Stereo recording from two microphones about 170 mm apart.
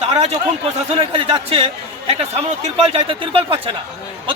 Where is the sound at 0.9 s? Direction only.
35° right (ahead or behind).